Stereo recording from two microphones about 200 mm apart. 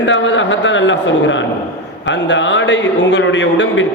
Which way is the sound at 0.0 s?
70° left (ahead or behind).